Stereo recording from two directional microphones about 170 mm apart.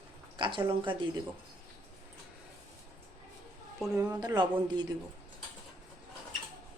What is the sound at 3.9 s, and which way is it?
Speech, 20° right (ahead or behind).